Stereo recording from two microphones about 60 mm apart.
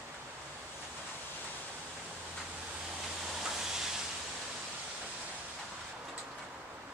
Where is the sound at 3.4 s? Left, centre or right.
Centre.